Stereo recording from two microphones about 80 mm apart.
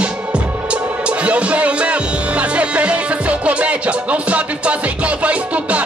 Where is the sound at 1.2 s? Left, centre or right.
Centre.